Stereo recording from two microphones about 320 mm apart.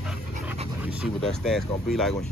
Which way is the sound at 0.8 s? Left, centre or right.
Centre.